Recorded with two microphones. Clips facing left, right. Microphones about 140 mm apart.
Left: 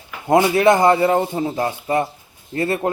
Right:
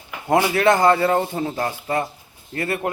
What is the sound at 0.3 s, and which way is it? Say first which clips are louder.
A man's voice: left 3 dB; 20° left (ahead or behind).